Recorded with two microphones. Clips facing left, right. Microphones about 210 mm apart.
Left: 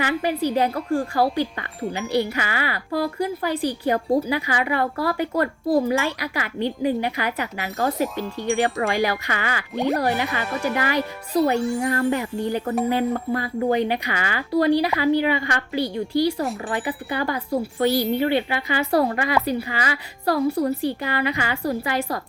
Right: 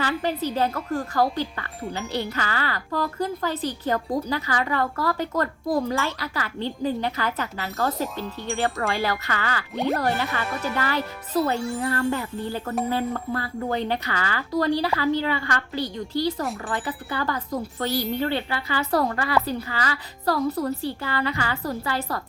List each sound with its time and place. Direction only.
0.0 s speech: 15° left (ahead or behind)
9.7 s speech: centre (ahead or behind)
10.0 s speech: 15° left (ahead or behind)